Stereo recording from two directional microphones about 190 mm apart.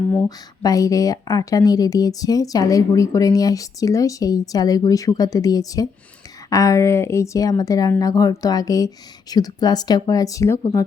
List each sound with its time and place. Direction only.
0.3 s speech: 20° left (ahead or behind)